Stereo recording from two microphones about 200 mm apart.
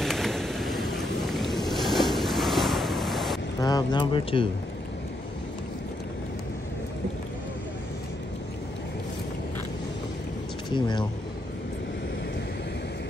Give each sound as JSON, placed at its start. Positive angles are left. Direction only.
{"t": 0.0, "sound": "vehicle", "side_deg": 0}
{"t": 3.6, "sound": "speech", "side_deg": 20}
{"t": 10.7, "sound": "speech", "side_deg": 25}